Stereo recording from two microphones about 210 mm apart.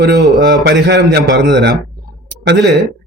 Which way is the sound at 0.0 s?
50° right (ahead or behind).